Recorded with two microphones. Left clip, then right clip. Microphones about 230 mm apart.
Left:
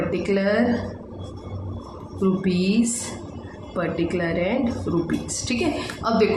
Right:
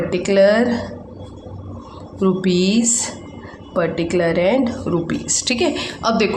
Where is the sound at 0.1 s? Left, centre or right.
Right.